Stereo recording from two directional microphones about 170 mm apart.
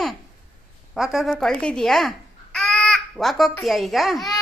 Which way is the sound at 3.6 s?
Centre (ahead or behind).